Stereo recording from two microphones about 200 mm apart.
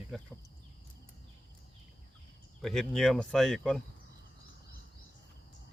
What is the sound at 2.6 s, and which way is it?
Speech, centre (ahead or behind).